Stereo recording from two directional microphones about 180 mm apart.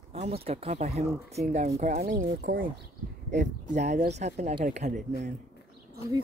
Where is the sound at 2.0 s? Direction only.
50° right (ahead or behind).